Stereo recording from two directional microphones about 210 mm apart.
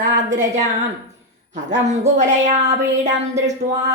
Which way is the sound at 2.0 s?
35° right (ahead or behind).